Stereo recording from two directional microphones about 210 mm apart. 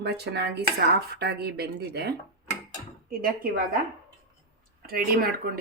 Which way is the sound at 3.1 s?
45° right (ahead or behind).